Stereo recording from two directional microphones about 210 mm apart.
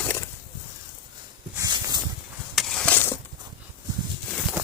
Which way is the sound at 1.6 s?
20° right (ahead or behind).